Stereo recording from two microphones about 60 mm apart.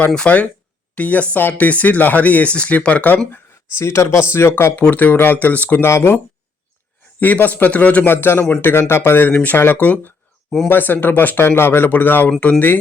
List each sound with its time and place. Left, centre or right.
0.1 s speech: centre
3.3 s a man's voice: left
5.8 s speech: left
7.2 s a man's voice: left
11.4 s a man's voice: left